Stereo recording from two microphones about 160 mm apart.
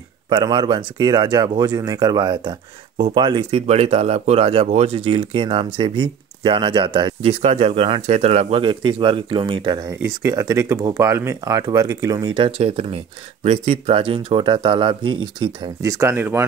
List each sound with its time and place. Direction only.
0.3 s speech: 30° right (ahead or behind)
3.6 s speech: 40° right (ahead or behind); by 16.4 s 15° right (ahead or behind)